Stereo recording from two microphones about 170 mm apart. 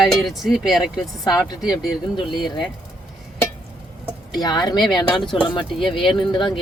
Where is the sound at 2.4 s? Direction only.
25° left (ahead or behind).